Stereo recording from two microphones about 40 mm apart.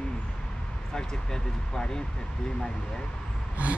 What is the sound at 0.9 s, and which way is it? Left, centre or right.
Speech, centre.